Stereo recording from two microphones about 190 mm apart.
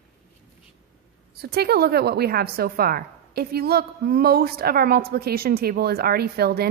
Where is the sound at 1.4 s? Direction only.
55° right (ahead or behind).